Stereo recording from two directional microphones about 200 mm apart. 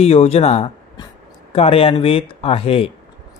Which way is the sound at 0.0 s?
30° left (ahead or behind).